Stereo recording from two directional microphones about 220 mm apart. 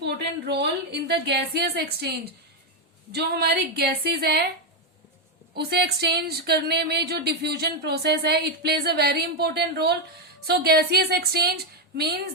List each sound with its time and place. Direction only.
0.0 s speech: 50° right (ahead or behind)
5.5 s speech: 50° right (ahead or behind)